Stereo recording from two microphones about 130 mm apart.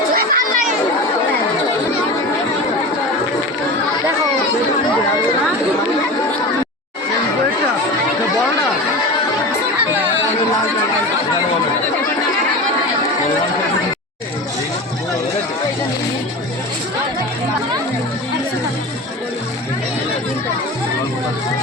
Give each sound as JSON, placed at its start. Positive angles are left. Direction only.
{"t": 0.1, "sound": "chatter", "side_deg": -90}